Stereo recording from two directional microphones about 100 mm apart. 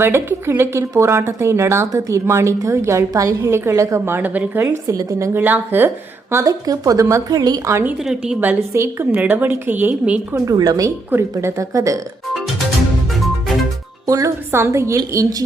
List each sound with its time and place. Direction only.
0.0 s a woman's voice: 25° right (ahead or behind)
4.6 s a woman's voice: 30° right (ahead or behind)
5.4 s a woman's voice: 15° right (ahead or behind)
6.3 s a woman's voice: 35° right (ahead or behind)
8.0 s a woman's voice: 5° right (ahead or behind)
8.4 s a woman's voice: 25° right (ahead or behind)
10.4 s a woman's voice: 35° right (ahead or behind)
14.1 s a woman's voice: 30° right (ahead or behind)